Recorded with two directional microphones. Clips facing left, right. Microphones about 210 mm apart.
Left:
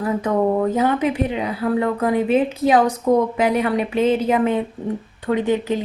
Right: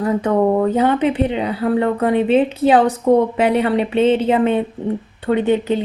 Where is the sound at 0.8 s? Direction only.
30° right (ahead or behind).